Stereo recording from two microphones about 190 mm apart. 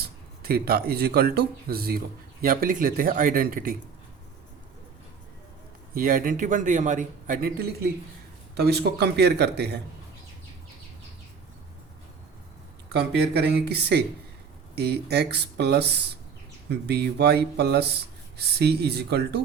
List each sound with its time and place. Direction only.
0.0 s a man's voice: 55° right (ahead or behind)
5.9 s a man's voice: 50° right (ahead or behind)
12.9 s speech: 60° right (ahead or behind)